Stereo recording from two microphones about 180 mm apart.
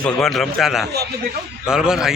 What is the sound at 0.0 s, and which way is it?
Speech, centre (ahead or behind).